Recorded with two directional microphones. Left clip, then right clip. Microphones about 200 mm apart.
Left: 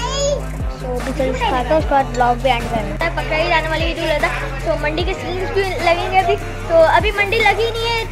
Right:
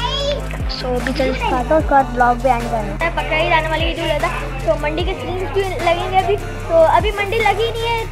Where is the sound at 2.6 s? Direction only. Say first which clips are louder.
Even; 5° left (ahead or behind).